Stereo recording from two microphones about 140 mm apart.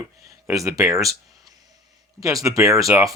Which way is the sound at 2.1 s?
25° right (ahead or behind).